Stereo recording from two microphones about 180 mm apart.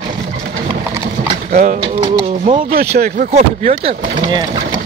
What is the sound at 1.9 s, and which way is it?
Speech, 30° right (ahead or behind).